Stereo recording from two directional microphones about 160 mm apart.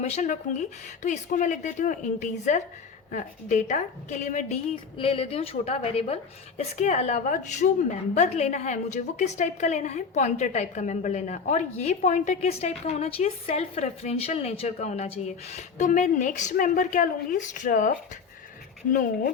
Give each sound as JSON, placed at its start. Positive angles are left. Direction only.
{"t": 0.0, "sound": "a woman's voice", "side_deg": 45}
{"t": 4.7, "sound": "a woman's voice", "side_deg": 35}